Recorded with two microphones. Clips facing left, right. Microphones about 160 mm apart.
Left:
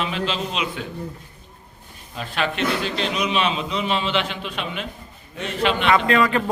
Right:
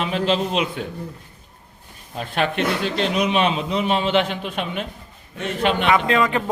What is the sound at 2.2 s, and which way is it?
A man's voice, 50° right (ahead or behind).